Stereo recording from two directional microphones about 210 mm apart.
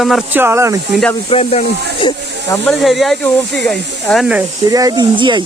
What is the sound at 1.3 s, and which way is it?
Speech, 30° left (ahead or behind).